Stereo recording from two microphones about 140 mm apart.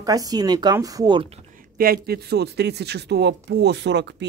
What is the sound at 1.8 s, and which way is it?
Speech, 90° right.